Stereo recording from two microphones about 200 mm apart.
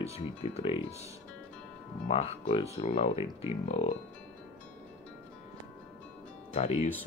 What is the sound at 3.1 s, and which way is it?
Speech, 15° right (ahead or behind).